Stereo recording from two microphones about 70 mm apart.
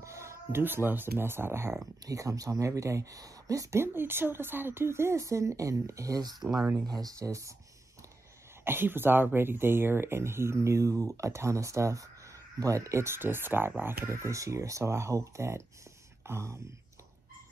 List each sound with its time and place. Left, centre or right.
0.0 s speech: right
2.0 s speech: right
3.7 s speech: right
8.6 s speech: right